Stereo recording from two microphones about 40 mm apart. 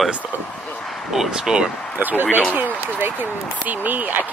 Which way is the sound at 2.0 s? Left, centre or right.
Right.